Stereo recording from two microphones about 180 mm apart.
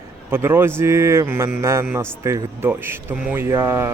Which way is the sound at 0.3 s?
15° right (ahead or behind).